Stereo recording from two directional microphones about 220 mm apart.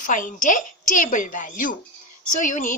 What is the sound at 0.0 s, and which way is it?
Speech, 35° left (ahead or behind).